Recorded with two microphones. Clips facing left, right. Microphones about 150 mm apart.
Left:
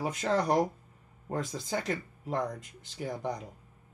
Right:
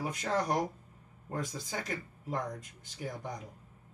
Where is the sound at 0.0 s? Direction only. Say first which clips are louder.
Left 4 dB; 85° left.